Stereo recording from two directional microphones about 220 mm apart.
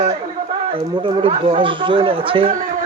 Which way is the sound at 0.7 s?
20° right (ahead or behind).